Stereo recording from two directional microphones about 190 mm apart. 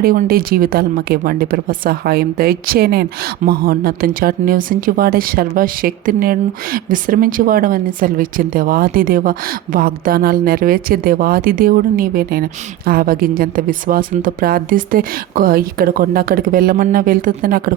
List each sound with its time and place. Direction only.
0.0 s a woman's voice: 50° right (ahead or behind)